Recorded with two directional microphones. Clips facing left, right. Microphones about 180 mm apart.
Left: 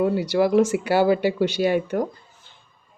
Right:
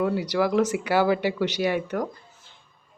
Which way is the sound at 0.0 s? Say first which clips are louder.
Left 4 dB; 25° left (ahead or behind).